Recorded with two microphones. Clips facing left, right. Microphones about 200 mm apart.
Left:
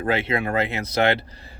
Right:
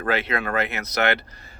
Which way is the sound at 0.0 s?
25° left (ahead or behind).